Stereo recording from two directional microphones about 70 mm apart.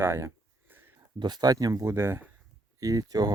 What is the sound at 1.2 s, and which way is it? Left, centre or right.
Speech, right.